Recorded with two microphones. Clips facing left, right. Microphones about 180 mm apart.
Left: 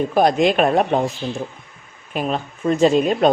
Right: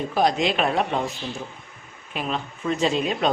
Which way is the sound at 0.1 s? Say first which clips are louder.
Left 4 dB; 50° left (ahead or behind).